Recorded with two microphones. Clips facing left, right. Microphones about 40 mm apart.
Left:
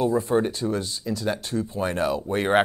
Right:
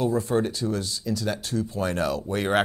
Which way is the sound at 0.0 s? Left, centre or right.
Left.